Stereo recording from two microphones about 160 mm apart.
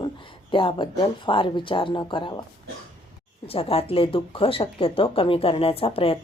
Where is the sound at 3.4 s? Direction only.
35° left (ahead or behind).